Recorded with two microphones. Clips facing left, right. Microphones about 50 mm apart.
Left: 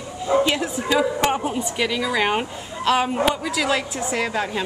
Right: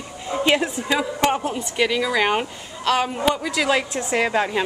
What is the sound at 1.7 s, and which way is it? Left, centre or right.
A woman's voice, centre.